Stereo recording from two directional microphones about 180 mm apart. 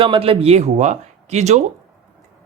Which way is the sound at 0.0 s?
30° right (ahead or behind).